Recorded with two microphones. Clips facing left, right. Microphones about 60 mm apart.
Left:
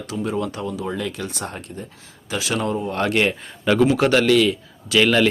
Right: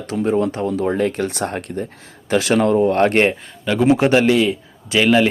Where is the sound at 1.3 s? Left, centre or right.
Right.